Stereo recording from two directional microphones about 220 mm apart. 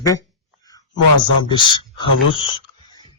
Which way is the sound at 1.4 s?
20° left (ahead or behind).